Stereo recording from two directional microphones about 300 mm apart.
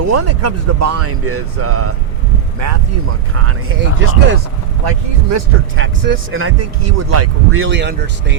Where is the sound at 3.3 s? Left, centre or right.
Right.